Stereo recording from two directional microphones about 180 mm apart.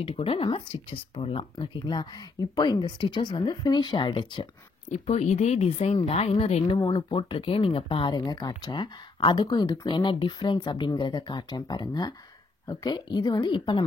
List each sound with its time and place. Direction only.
0.0 s speech: 30° left (ahead or behind)
4.8 s speech: 40° left (ahead or behind)